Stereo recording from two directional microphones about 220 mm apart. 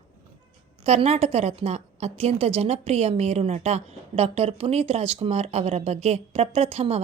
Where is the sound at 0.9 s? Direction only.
30° right (ahead or behind).